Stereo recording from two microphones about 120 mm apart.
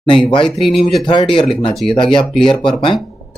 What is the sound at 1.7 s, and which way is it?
Speech, centre (ahead or behind).